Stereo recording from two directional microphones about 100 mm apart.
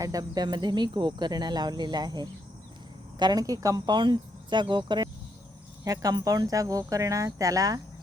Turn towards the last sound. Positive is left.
turn(degrees=-35)  # may be behind; listen again after turning